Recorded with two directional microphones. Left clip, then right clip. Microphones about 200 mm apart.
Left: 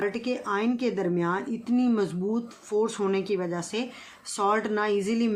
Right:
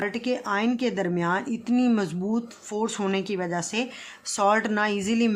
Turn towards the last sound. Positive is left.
turn(degrees=-35)  # may be behind; listen again after turning